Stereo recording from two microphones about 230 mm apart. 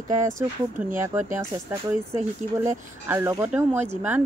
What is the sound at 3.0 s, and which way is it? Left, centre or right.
Speech, centre.